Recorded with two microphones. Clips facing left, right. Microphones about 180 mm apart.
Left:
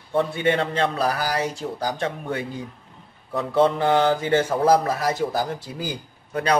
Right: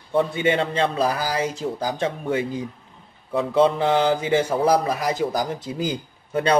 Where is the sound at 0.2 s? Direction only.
20° right (ahead or behind).